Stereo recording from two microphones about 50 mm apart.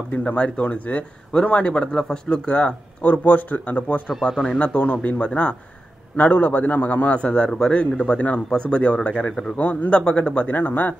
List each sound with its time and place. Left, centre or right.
0.1 s speech: left
1.9 s speech: centre
3.1 s a man's voice: left
4.2 s speech: centre
4.6 s speech: left
9.6 s a man's voice: left
9.8 s speech: left
10.5 s a man's voice: left